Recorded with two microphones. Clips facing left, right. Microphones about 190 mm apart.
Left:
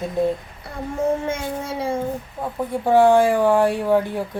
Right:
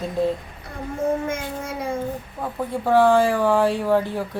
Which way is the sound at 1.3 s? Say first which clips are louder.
Left 2 dB; 30° left (ahead or behind).